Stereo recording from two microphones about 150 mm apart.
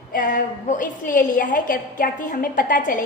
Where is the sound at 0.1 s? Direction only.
65° left (ahead or behind).